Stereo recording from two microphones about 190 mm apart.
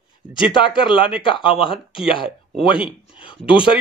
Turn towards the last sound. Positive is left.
turn(degrees=25)  # may be behind; listen again after turning